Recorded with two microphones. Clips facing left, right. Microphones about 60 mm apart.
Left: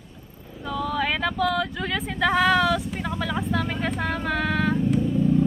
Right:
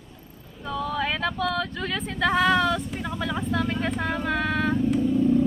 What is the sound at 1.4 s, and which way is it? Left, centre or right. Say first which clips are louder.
Speech: left 3 dB; centre.